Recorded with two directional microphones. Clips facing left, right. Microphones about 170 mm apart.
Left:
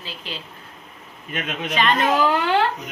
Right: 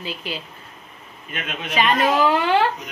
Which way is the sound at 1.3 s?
40° left (ahead or behind).